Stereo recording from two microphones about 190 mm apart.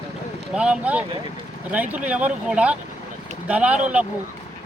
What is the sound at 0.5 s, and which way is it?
Speech, 5° right (ahead or behind).